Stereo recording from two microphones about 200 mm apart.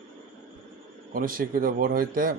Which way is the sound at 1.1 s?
45° right (ahead or behind).